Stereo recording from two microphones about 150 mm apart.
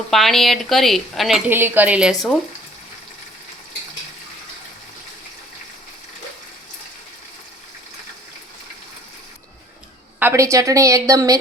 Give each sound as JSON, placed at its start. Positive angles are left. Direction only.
{"t": 0.1, "sound": "speech", "side_deg": 0}
{"t": 1.5, "sound": "speech", "side_deg": -15}
{"t": 10.2, "sound": "a woman's voice", "side_deg": -15}